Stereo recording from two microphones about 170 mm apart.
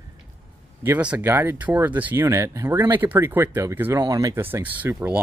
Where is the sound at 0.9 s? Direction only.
10° right (ahead or behind).